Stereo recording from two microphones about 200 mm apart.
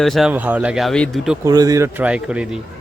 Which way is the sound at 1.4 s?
20° right (ahead or behind).